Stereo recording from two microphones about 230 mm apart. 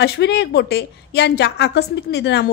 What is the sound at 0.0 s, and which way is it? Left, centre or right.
A woman's voice, left.